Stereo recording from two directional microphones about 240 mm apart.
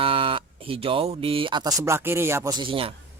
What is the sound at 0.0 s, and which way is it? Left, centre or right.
Speech, right.